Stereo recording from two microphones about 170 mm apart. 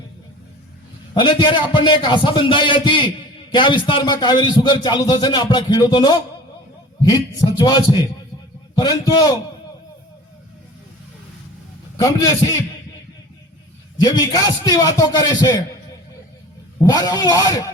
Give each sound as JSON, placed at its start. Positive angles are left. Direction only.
{"t": 1.1, "sound": "a man's voice", "side_deg": 30}
{"t": 11.9, "sound": "a man's voice", "side_deg": 20}
{"t": 14.0, "sound": "a man's voice", "side_deg": 20}
{"t": 16.7, "sound": "a man's voice", "side_deg": 20}